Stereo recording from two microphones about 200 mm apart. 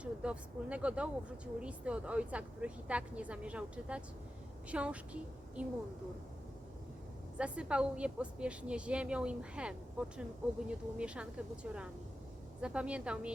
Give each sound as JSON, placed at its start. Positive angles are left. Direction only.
{"t": 0.0, "sound": "a woman's voice", "side_deg": -5}
{"t": 7.3, "sound": "speech", "side_deg": -5}